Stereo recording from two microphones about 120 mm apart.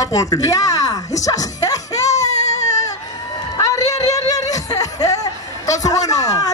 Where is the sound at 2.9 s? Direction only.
30° left (ahead or behind).